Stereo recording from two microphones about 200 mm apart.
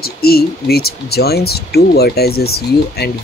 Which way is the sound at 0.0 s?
50° left (ahead or behind).